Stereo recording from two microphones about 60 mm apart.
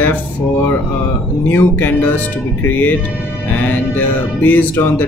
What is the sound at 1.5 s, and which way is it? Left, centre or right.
Speech, left.